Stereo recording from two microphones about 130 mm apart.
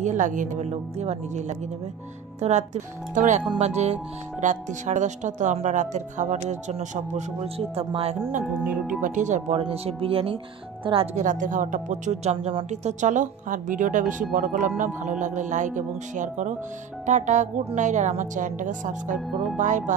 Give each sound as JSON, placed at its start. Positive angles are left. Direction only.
{"t": 0.0, "sound": "speech", "side_deg": -75}
{"t": 3.5, "sound": "speech", "side_deg": -60}
{"t": 8.6, "sound": "speech", "side_deg": -5}
{"t": 9.0, "sound": "speech", "side_deg": -70}
{"t": 9.6, "sound": "speech", "side_deg": -45}
{"t": 11.1, "sound": "speech", "side_deg": -80}
{"t": 12.8, "sound": "a woman's voice", "side_deg": -70}
{"t": 14.8, "sound": "speech", "side_deg": -70}